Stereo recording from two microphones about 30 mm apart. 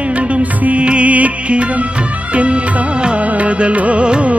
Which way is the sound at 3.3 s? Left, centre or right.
Right.